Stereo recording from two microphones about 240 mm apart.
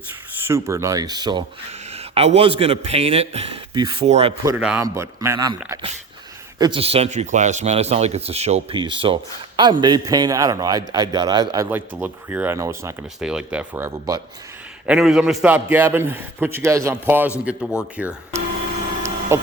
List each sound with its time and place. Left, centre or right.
0.4 s a man's voice: centre
4.4 s a man's voice: centre
19.3 s a sound: centre